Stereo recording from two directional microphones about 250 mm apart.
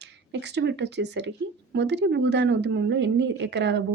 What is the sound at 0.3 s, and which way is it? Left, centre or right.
A woman's voice, right.